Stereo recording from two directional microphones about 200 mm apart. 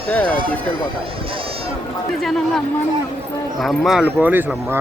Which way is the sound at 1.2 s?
25° right (ahead or behind).